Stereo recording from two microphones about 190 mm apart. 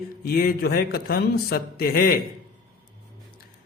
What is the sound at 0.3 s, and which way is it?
Mantra, 55° left (ahead or behind).